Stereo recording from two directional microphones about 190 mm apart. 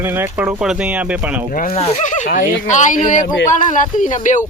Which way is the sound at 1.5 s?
45° left (ahead or behind).